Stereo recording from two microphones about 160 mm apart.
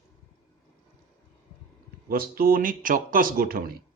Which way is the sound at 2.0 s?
70° right (ahead or behind).